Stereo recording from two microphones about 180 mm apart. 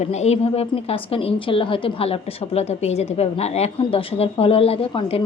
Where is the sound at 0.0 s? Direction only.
40° left (ahead or behind).